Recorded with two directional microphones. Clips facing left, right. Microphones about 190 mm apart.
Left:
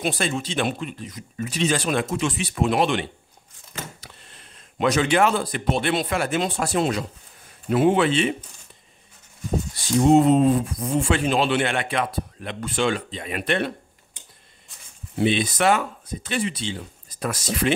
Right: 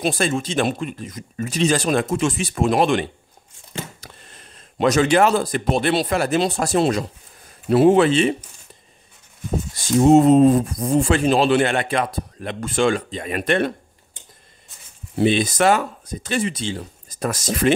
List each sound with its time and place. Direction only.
0.0 s speech: 45° right (ahead or behind)
4.0 s a sound: 45° right (ahead or behind)
4.7 s speech: 40° right (ahead or behind)
10.0 s speech: 40° right (ahead or behind)
15.1 s speech: 40° right (ahead or behind)